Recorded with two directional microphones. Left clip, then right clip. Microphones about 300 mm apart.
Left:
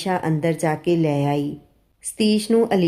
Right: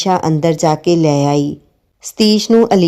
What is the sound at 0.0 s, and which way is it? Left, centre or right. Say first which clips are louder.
A woman's voice: right 8 dB; right.